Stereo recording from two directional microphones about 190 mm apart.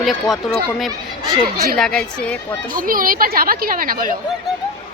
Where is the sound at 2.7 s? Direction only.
45° right (ahead or behind).